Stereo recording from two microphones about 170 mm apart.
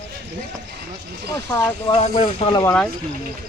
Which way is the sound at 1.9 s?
35° left (ahead or behind).